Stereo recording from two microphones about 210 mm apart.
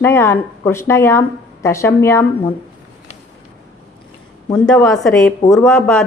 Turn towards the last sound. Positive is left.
turn(degrees=5)  # may be behind; listen again after turning